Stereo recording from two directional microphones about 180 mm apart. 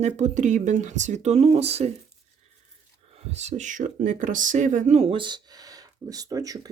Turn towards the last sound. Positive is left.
turn(degrees=-20)  # may be behind; listen again after turning